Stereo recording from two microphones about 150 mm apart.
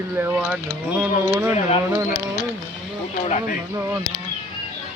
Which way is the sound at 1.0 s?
10° right (ahead or behind).